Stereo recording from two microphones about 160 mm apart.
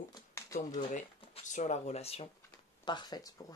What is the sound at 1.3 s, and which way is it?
Speech, 45° left (ahead or behind).